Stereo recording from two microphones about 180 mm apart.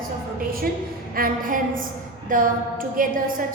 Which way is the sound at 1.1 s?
50° right (ahead or behind).